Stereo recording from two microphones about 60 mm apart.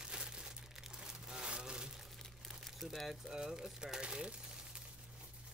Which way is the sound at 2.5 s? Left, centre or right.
Centre.